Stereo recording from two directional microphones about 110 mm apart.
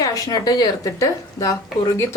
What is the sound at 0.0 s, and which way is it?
Speech, 35° left (ahead or behind).